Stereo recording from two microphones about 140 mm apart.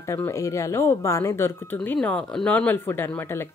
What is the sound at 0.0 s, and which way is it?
Speech, 20° left (ahead or behind).